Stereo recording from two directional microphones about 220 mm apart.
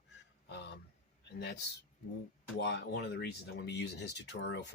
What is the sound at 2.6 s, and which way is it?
Speech, 50° left (ahead or behind).